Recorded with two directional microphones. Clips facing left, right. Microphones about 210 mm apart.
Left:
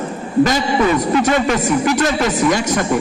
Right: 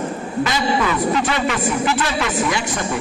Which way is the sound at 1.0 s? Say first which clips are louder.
Left 4 dB; 45° left (ahead or behind).